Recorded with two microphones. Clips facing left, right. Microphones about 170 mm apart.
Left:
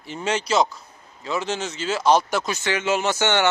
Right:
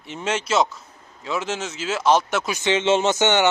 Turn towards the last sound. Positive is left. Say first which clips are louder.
# right 2 dB
turn(degrees=-20)  # may be behind; listen again after turning